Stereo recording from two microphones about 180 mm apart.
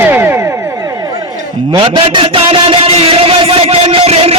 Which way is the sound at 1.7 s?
30° right (ahead or behind).